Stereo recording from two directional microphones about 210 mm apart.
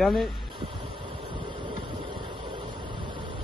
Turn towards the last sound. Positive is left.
turn(degrees=-25)  # may be behind; listen again after turning